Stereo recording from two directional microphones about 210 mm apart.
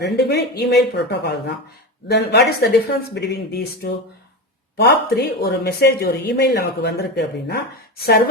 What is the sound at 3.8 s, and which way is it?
Speech, 45° left (ahead or behind).